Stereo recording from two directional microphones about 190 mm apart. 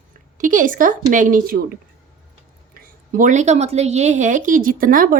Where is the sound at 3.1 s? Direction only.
40° right (ahead or behind).